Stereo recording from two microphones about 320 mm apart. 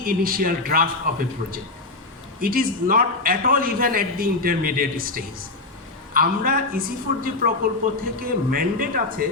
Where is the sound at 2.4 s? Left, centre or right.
Right.